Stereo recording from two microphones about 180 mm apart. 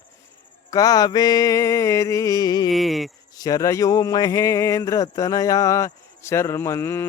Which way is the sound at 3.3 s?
20° left (ahead or behind).